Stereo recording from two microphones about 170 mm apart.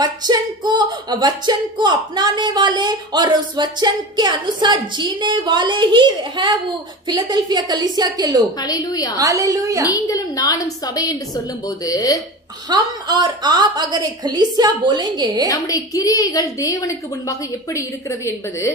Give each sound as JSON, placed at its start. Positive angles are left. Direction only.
{"t": 0.0, "sound": "singing", "side_deg": -25}
{"t": 8.5, "sound": "a woman's voice", "side_deg": 20}
{"t": 9.2, "sound": "singing", "side_deg": -20}
{"t": 9.8, "sound": "a woman's voice", "side_deg": 20}
{"t": 12.6, "sound": "singing", "side_deg": -25}
{"t": 15.4, "sound": "a woman's voice", "side_deg": 20}